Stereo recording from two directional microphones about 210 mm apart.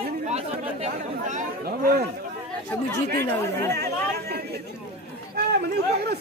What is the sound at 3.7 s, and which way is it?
Speech, 50° right (ahead or behind).